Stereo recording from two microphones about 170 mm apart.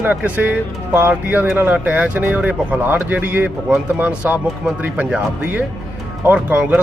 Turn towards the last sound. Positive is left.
turn(degrees=-10)  # may be behind; listen again after turning